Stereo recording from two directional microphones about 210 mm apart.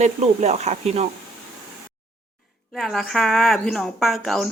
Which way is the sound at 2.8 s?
Centre (ahead or behind).